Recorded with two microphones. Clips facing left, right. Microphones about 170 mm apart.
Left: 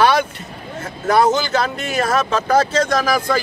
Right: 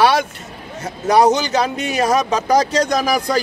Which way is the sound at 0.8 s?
15° right (ahead or behind).